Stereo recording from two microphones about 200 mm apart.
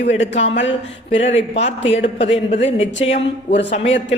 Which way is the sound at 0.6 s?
65° left (ahead or behind).